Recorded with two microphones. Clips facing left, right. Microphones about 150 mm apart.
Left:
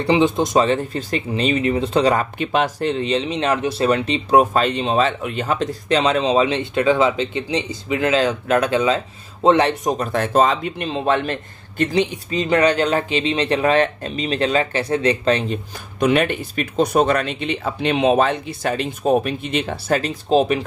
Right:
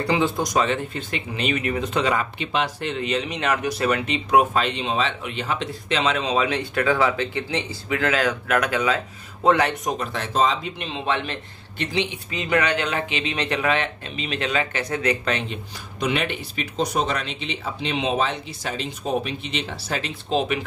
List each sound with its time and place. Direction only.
0.0 s speech: 25° left (ahead or behind)
9.9 s speech: 50° left (ahead or behind); by 15.6 s 30° left (ahead or behind)
16.0 s speech: 50° left (ahead or behind)